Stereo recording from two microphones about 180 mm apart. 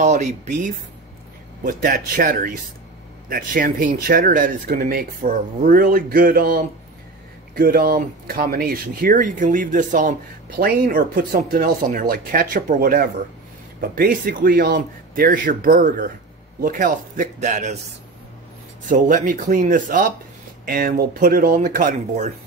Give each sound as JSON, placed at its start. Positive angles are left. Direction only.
{"t": 0.0, "sound": "speech", "side_deg": -40}
{"t": 18.9, "sound": "speech", "side_deg": -45}